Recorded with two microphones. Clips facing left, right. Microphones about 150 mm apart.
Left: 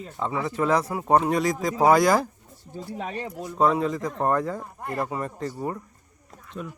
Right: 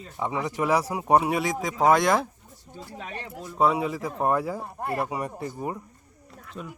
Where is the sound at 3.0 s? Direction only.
35° left (ahead or behind).